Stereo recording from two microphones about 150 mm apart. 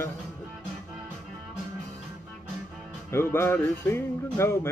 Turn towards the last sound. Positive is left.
turn(degrees=15)  # may be behind; listen again after turning